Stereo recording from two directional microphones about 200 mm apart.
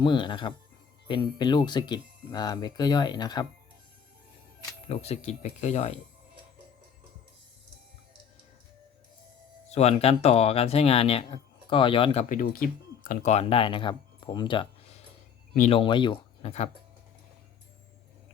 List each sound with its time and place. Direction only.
0.0 s speech: 25° left (ahead or behind)
4.9 s speech: 30° left (ahead or behind)
9.7 s speech: 30° left (ahead or behind)
12.3 s speech: 45° left (ahead or behind)
13.1 s speech: 35° left (ahead or behind)
15.7 s speech: 25° left (ahead or behind)